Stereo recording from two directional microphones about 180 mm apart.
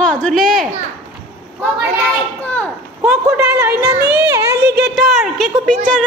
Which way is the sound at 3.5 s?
20° right (ahead or behind).